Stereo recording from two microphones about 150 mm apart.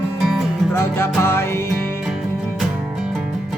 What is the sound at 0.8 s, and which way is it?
Music, 15° left (ahead or behind).